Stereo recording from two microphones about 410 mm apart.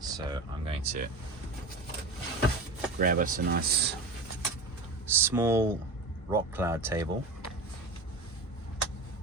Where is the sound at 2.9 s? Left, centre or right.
Centre.